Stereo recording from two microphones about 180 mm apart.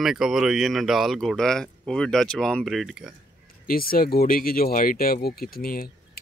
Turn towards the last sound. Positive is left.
turn(degrees=55)  # may be behind; listen again after turning